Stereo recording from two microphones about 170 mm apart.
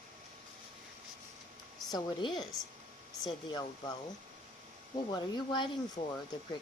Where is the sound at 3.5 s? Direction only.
20° left (ahead or behind).